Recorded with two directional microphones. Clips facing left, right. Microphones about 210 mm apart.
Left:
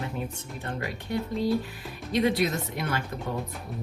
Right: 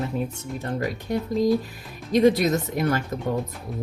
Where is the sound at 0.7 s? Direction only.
40° right (ahead or behind).